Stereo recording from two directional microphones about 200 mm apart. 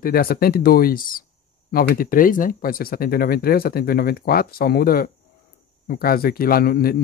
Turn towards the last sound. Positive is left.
turn(degrees=50)  # may be behind; listen again after turning